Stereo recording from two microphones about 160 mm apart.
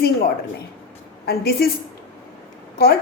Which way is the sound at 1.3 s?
75° left (ahead or behind).